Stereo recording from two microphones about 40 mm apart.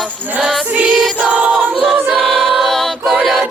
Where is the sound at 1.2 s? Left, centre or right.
Right.